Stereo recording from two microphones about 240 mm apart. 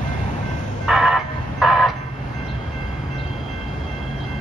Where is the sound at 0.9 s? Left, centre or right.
Centre.